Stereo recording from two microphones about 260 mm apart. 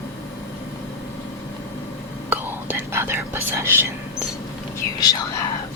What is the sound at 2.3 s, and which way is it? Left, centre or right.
Whispering, centre.